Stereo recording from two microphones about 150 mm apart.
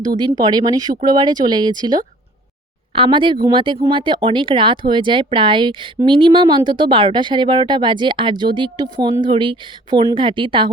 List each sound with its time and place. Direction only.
0.0 s speech: 30° right (ahead or behind)